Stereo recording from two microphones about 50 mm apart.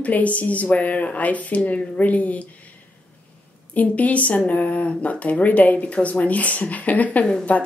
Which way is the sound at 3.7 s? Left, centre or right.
Left.